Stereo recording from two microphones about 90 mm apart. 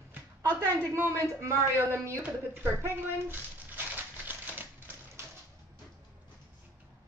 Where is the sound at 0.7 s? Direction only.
35° right (ahead or behind).